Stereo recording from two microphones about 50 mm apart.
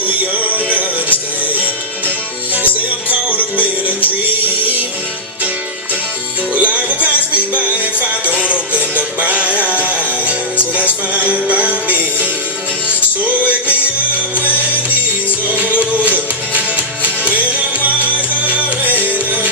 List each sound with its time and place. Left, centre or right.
0.3 s music: right
3.1 s music: right
6.5 s music: right
15.5 s music: right
17.3 s music: right